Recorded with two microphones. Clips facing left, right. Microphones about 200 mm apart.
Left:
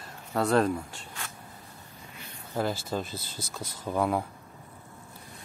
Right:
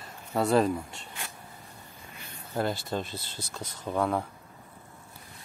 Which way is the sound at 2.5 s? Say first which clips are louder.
Even; 5° left (ahead or behind).